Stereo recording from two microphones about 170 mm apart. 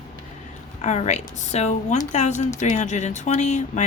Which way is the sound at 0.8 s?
40° left (ahead or behind).